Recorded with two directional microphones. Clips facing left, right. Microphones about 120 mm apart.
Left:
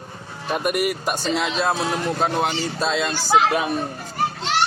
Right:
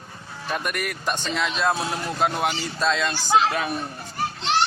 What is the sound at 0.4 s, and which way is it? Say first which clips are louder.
Speech: left 6 dB; 15° left (ahead or behind).